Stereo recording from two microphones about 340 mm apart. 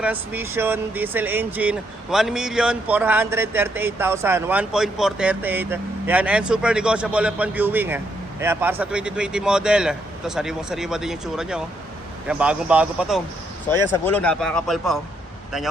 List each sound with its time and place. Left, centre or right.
0.0 s speech: centre